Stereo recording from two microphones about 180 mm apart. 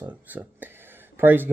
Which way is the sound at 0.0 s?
10° right (ahead or behind).